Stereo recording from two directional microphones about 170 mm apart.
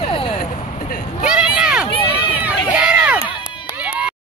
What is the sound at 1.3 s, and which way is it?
Run, 5° right (ahead or behind).